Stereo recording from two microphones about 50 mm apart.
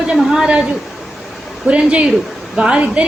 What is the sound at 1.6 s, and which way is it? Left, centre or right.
A woman's voice, right.